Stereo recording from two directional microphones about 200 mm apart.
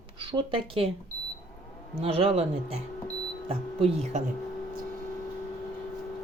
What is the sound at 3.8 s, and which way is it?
Speech, 30° right (ahead or behind).